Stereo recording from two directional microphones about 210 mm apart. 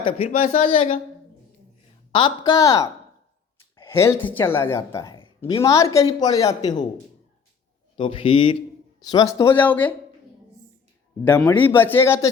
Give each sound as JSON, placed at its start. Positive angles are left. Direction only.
{"t": 0.0, "sound": "speech", "side_deg": 30}
{"t": 2.1, "sound": "speech", "side_deg": 20}
{"t": 7.9, "sound": "speech", "side_deg": 25}
{"t": 11.3, "sound": "speech", "side_deg": 10}